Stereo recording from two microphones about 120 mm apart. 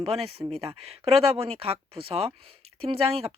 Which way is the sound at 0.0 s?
55° right (ahead or behind).